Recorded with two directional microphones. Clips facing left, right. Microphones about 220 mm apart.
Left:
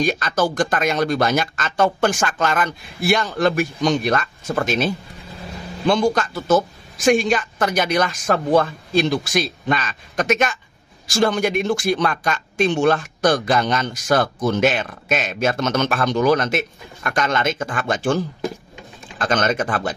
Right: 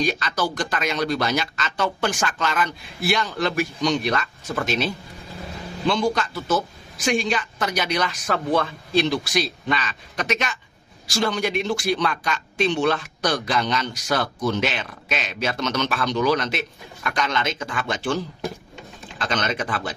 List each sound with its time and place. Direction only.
0.0 s speech: 50° left (ahead or behind)